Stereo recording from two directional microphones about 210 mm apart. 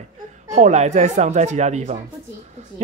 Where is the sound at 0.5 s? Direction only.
35° right (ahead or behind).